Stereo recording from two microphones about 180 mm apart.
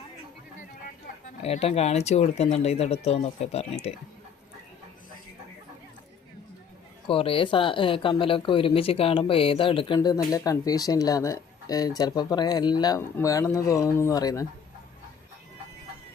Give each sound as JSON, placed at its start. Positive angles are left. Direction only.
{"t": 1.4, "sound": "speech", "side_deg": 35}
{"t": 7.1, "sound": "speech", "side_deg": 30}